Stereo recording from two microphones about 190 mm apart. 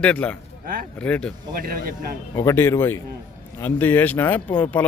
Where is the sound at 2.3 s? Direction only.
15° left (ahead or behind).